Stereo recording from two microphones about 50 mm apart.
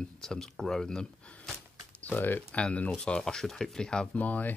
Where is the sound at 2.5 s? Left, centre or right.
Left.